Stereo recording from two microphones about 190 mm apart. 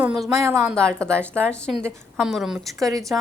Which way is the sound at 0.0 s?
5° right (ahead or behind).